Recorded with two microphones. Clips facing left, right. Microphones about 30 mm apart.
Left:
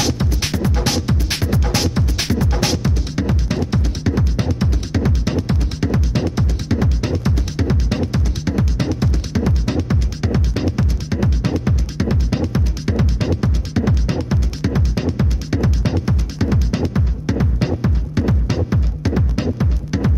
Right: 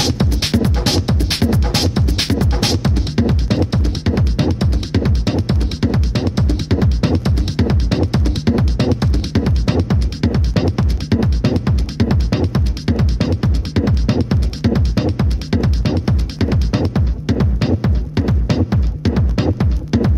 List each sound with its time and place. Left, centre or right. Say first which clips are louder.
0.2 s music: right 4 dB; right
2.1 s music: right 2 dB; right